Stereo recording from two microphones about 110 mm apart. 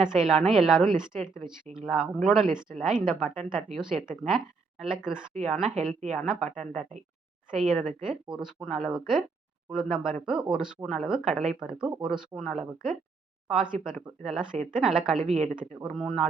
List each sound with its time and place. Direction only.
0.0 s a woman's voice: 5° right (ahead or behind)
7.5 s a woman's voice: 5° right (ahead or behind)